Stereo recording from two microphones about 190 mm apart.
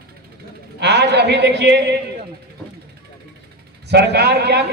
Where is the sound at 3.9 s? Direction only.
60° right (ahead or behind).